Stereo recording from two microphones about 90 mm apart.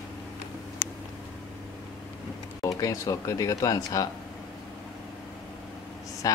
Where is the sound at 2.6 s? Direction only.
40° left (ahead or behind).